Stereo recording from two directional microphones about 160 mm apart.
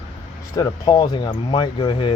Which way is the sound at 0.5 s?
25° left (ahead or behind).